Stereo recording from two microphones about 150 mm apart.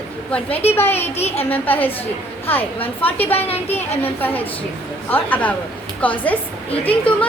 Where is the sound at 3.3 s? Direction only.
40° left (ahead or behind).